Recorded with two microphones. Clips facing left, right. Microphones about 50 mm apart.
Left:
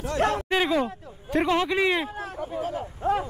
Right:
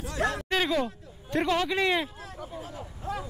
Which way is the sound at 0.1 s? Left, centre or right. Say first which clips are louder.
Left 5 dB; left.